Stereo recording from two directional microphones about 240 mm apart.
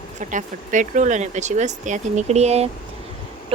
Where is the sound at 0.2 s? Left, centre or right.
Right.